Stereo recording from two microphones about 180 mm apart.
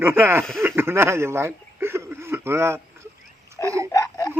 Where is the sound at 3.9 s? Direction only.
15° left (ahead or behind).